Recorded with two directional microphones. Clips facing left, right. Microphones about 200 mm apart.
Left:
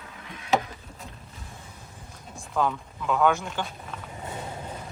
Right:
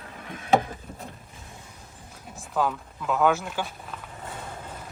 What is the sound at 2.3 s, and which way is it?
Speech, centre (ahead or behind).